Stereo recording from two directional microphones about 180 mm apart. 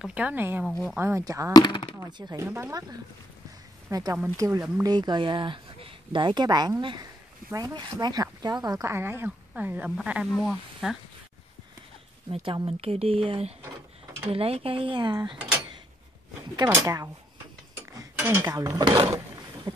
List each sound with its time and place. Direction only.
0.0 s speech: 5° right (ahead or behind)
1.5 s speech: 25° left (ahead or behind)
2.0 s speech: 25° right (ahead or behind); by 11.0 s centre (ahead or behind)
12.3 s speech: 30° right (ahead or behind)
16.5 s speech: 20° right (ahead or behind)
17.9 s dishes: 15° right (ahead or behind)